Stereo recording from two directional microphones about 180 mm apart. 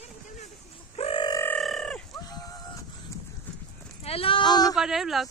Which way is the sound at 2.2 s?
20° left (ahead or behind).